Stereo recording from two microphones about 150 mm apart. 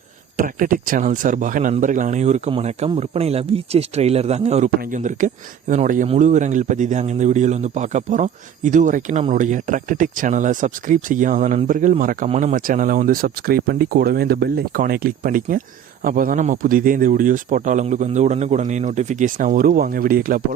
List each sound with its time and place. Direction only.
0.3 s speech: 65° right (ahead or behind); by 4.7 s 45° right (ahead or behind)
4.8 s speech: 60° right (ahead or behind)